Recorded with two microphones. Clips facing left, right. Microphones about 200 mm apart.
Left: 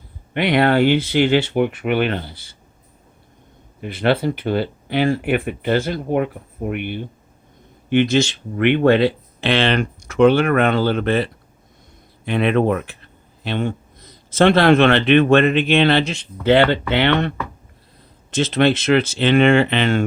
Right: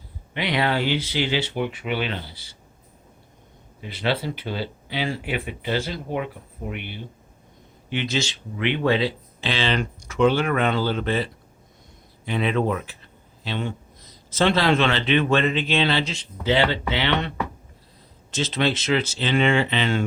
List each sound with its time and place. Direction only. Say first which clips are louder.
0.3 s speech: left 8 dB; 55° left (ahead or behind)
3.8 s a man's voice: left 7 dB; 55° left (ahead or behind)